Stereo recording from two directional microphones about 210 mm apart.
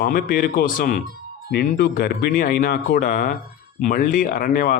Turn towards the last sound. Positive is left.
turn(degrees=45)  # may be behind; listen again after turning